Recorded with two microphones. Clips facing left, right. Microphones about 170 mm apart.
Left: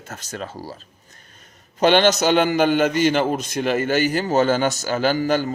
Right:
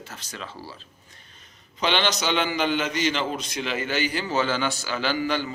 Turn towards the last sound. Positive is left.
turn(degrees=45)  # may be behind; listen again after turning